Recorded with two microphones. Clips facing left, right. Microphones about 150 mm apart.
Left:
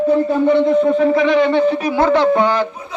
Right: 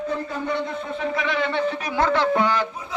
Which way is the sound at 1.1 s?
25° left (ahead or behind).